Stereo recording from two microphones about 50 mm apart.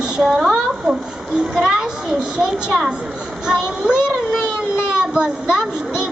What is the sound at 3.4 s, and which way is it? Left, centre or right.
Speech, centre.